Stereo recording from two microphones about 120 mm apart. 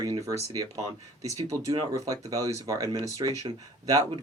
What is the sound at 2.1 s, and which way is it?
Speech, 30° right (ahead or behind).